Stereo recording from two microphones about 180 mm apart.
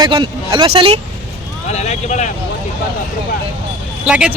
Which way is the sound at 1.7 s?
40° left (ahead or behind).